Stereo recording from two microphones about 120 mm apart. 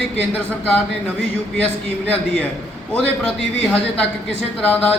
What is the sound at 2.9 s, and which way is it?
Speech, 10° left (ahead or behind).